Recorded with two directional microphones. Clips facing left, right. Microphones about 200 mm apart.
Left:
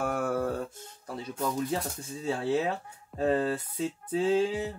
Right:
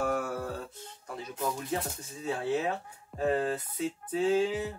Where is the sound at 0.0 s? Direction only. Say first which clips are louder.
Left 2 dB; 50° left (ahead or behind).